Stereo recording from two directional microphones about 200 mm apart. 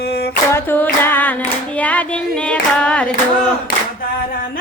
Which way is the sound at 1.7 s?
5° left (ahead or behind).